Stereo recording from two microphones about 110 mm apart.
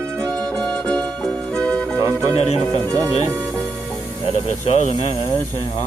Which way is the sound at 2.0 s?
30° right (ahead or behind).